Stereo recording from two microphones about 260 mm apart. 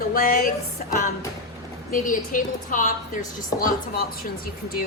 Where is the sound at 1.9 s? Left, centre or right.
Left.